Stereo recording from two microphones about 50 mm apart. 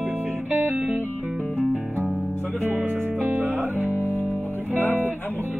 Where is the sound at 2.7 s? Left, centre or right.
Right.